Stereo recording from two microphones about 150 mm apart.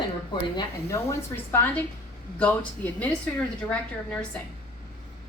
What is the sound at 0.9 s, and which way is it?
A woman's voice, 20° left (ahead or behind).